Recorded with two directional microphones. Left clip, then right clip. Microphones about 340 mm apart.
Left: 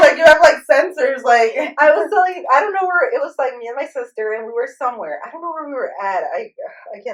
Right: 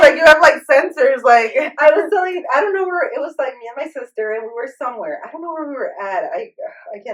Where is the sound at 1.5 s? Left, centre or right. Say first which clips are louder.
Right 1 dB; centre.